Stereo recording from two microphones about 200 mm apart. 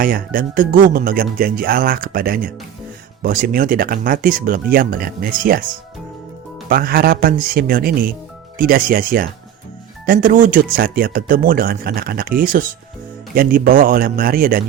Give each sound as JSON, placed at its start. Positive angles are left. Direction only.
{"t": 0.0, "sound": "speech", "side_deg": -45}
{"t": 6.7, "sound": "speech", "side_deg": -50}